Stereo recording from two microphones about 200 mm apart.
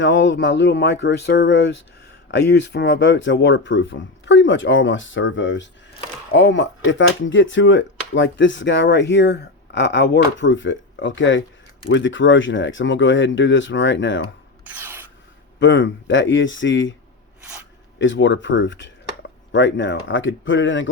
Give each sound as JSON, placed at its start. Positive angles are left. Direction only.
{"t": 0.0, "sound": "speech", "side_deg": 65}
{"t": 14.6, "sound": "rub", "side_deg": -10}
{"t": 15.6, "sound": "speech", "side_deg": 65}
{"t": 18.0, "sound": "speech", "side_deg": 65}